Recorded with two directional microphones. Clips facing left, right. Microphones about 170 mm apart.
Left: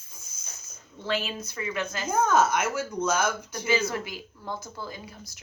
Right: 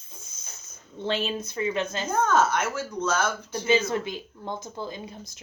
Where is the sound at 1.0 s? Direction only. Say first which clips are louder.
Right 2 dB; 30° right (ahead or behind).